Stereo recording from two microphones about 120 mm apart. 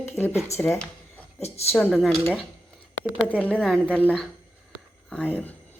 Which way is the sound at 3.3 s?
10° right (ahead or behind).